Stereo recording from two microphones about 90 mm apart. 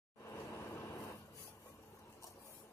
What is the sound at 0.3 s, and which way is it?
Vehicle, 30° left (ahead or behind).